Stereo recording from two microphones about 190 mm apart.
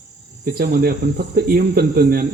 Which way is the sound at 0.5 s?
55° right (ahead or behind).